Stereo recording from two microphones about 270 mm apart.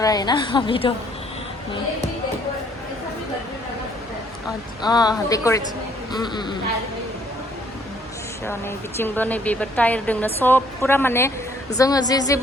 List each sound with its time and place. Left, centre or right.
0.0 s a woman's voice: centre
4.8 s a woman's voice: centre
8.4 s a woman's voice: centre